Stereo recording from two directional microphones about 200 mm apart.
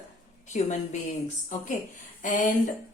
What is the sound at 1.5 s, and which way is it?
Speech, 40° left (ahead or behind).